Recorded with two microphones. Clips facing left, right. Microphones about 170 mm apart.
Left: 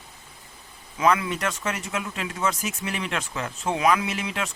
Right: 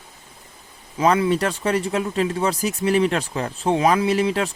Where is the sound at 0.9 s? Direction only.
30° right (ahead or behind).